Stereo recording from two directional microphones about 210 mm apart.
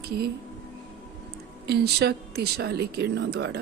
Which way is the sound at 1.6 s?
50° right (ahead or behind).